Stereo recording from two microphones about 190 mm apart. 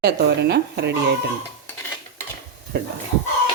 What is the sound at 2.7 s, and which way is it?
Speech, 60° right (ahead or behind).